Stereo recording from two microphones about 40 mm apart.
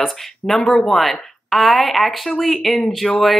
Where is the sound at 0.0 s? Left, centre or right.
Centre.